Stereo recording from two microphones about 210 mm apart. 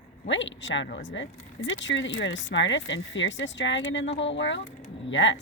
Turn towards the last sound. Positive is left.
turn(degrees=60)  # may be behind; listen again after turning